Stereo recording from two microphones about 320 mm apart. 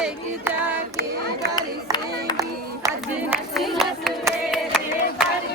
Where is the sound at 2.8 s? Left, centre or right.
Centre.